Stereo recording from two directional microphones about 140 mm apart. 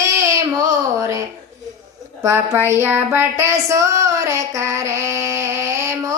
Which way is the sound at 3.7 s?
20° right (ahead or behind).